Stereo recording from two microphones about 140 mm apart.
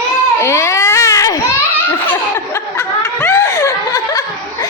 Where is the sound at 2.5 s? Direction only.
20° left (ahead or behind).